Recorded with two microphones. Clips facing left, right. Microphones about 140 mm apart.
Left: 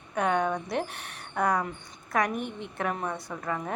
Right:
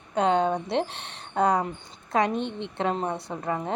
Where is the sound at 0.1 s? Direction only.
25° right (ahead or behind).